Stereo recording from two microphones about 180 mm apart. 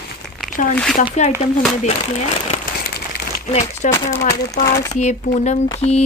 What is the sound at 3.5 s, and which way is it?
Speech, 40° left (ahead or behind).